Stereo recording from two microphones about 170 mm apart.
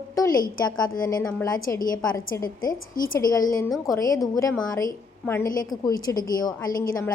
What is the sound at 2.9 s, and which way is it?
Speech, 55° left (ahead or behind).